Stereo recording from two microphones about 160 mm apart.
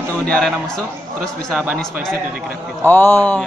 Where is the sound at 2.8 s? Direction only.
10° left (ahead or behind).